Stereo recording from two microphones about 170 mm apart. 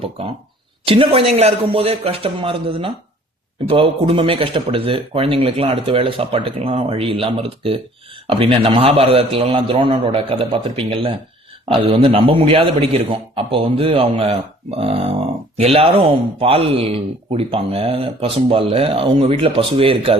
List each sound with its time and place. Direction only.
0.2 s a man's voice: 35° right (ahead or behind)